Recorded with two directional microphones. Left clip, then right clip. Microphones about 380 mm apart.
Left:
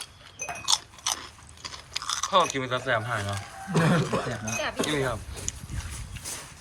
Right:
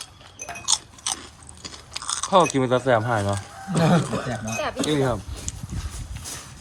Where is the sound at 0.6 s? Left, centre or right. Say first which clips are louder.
Right 1 dB; centre.